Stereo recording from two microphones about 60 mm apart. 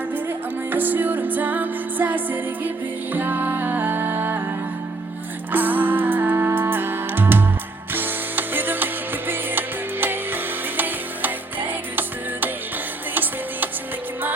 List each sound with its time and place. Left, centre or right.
0.3 s music: right
5.5 s music: right